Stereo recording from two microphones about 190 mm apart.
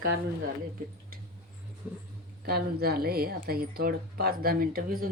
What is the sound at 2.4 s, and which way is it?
A woman's voice, 55° right (ahead or behind).